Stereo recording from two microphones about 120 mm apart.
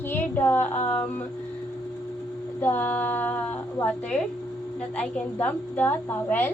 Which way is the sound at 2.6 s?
15° left (ahead or behind).